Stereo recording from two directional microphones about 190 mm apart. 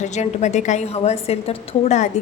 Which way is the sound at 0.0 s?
35° left (ahead or behind).